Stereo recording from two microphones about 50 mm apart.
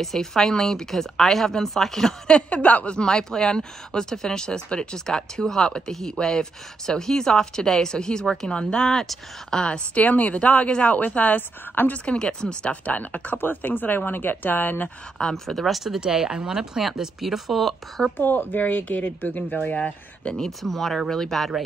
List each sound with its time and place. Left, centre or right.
0.0 s speech: centre
2.6 s speech: left
9.9 s speech: left
12.0 s speech: centre
12.8 s speech: left
15.1 s speech: centre
18.1 s speech: left
20.3 s speech: centre